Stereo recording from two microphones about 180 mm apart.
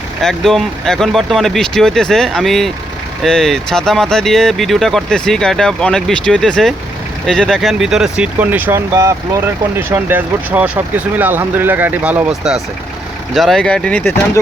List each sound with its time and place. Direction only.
0.2 s speech: centre (ahead or behind)